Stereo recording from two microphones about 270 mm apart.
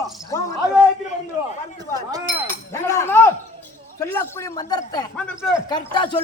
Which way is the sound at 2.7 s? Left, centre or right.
Centre.